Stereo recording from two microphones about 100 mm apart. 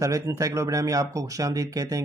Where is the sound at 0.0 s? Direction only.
30° right (ahead or behind).